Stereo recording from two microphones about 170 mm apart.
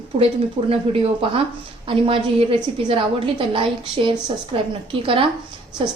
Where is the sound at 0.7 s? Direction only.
35° right (ahead or behind).